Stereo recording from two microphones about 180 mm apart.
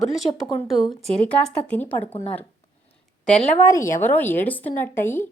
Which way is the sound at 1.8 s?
10° left (ahead or behind).